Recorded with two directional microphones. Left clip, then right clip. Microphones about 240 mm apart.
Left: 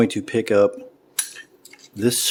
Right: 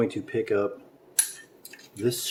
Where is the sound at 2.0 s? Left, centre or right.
Left.